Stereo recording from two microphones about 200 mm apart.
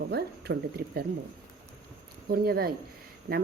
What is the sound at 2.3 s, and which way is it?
Speech, 50° right (ahead or behind).